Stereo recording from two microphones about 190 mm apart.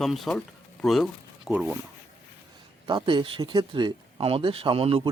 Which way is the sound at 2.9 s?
25° right (ahead or behind).